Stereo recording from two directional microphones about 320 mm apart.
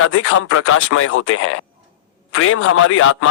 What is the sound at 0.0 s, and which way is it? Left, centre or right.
A man's voice, left.